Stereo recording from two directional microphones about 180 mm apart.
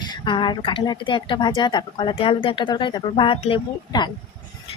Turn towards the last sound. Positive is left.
turn(degrees=25)  # may be behind; listen again after turning